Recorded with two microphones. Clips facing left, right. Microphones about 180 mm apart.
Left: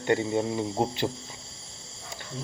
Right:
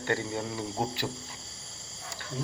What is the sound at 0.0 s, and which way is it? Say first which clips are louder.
Speech: left 6 dB; 20° left (ahead or behind).